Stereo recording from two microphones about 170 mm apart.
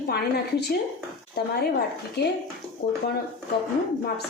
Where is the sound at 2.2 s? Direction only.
80° left.